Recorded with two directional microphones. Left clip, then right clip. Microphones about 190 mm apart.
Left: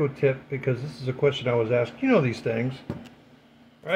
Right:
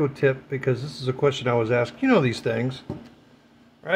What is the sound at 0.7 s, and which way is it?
Speech, 55° right (ahead or behind).